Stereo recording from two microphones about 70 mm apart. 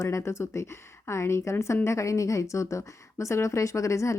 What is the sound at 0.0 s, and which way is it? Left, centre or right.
A woman's voice, left.